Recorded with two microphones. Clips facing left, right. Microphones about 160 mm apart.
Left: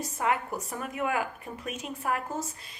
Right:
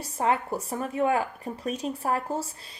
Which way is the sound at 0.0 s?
30° right (ahead or behind).